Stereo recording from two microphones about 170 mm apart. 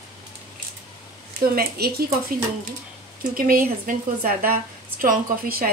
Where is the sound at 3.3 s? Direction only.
55° right (ahead or behind).